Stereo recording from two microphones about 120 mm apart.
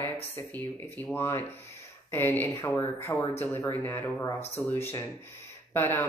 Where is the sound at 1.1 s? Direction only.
20° left (ahead or behind).